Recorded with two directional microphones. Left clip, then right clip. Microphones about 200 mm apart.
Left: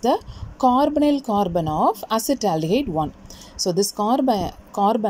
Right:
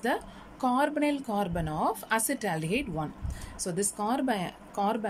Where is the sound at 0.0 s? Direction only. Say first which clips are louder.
Left 10 dB; 15° left (ahead or behind).